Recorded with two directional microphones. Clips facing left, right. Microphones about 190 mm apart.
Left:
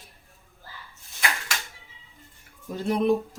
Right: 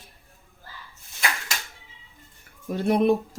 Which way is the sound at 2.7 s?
65° right (ahead or behind).